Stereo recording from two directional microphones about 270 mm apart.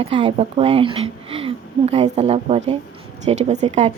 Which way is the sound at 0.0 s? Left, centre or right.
Right.